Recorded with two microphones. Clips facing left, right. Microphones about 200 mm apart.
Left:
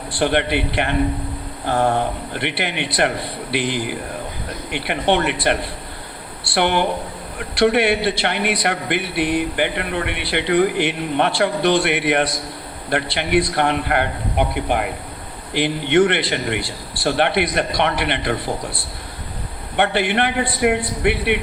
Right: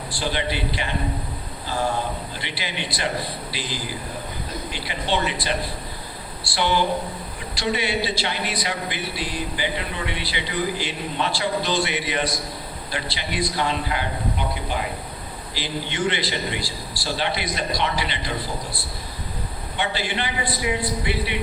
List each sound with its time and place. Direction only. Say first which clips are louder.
0.2 s a man's voice: left 8 dB; 60° left (ahead or behind)
19.7 s a man's voice: left 8 dB; 60° left (ahead or behind)